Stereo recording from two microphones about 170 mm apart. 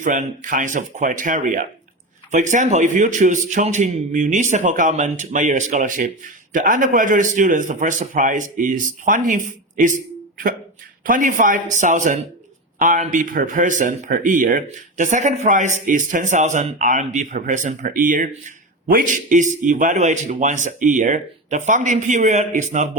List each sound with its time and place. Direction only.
0.0 s a man's voice: 50° right (ahead or behind)
11.0 s a man's voice: 50° right (ahead or behind)